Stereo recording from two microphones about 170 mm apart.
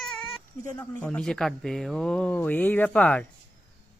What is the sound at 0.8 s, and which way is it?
Speech, 5° left (ahead or behind).